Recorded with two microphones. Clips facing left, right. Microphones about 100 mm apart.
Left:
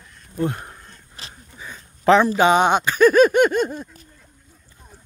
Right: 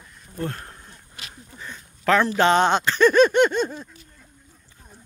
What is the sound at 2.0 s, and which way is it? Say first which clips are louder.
Speech: left 5 dB; 20° left (ahead or behind).